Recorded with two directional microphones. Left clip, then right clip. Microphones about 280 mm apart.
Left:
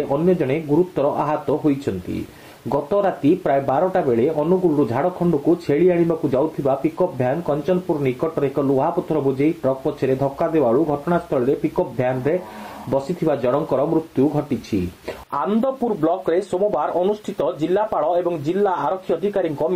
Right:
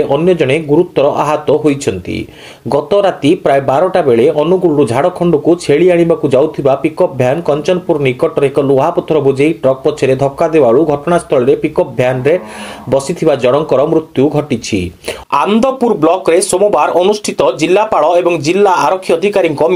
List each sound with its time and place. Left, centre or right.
0.3 s speech: right